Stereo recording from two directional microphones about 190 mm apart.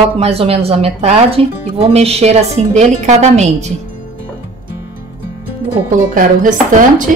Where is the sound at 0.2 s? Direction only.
30° right (ahead or behind).